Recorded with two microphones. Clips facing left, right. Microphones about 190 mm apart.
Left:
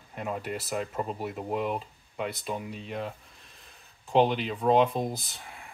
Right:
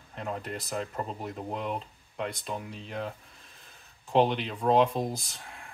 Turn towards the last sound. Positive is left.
turn(degrees=0)  # may be behind; listen again after turning